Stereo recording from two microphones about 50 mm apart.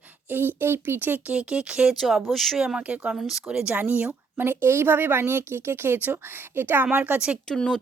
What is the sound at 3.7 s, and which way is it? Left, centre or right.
A woman's voice, right.